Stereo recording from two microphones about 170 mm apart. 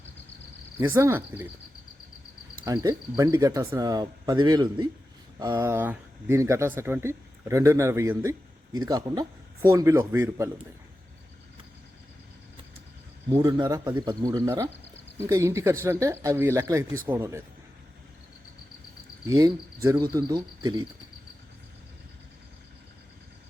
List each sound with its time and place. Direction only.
0.8 s speech: 15° right (ahead or behind)
2.6 s speech: 20° right (ahead or behind)
13.3 s speech: 20° right (ahead or behind)
19.3 s speech: 20° right (ahead or behind)